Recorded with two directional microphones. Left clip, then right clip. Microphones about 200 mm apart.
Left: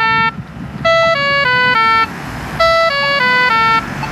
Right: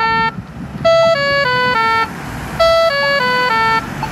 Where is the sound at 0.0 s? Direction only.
65° right (ahead or behind).